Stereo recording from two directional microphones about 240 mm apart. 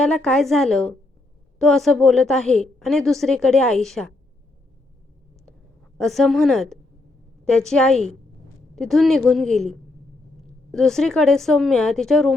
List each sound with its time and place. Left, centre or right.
0.0 s a woman's voice: centre
6.0 s a woman's voice: centre